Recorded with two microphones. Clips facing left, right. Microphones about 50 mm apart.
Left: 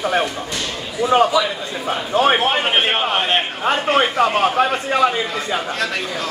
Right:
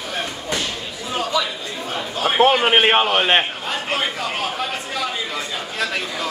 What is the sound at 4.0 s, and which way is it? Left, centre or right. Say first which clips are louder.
A man's voice: left 8 dB; left.